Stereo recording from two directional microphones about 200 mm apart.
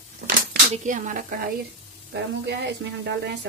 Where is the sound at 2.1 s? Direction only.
60° right (ahead or behind).